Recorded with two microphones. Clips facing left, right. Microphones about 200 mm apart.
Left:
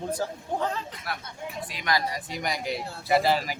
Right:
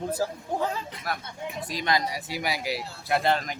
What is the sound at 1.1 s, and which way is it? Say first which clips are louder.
Speech: right 2 dB; 45° right (ahead or behind).